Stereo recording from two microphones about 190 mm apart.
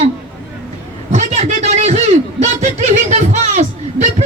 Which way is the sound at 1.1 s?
35° right (ahead or behind).